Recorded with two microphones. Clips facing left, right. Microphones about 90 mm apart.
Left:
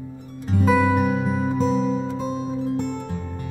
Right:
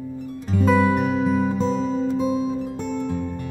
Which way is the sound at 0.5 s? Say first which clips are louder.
Even; 5° left (ahead or behind).